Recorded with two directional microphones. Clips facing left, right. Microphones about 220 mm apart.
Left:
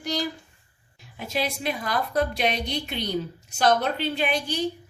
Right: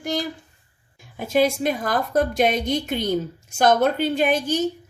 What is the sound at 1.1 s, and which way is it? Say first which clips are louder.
A woman's voice: right 9 dB; 50° right (ahead or behind).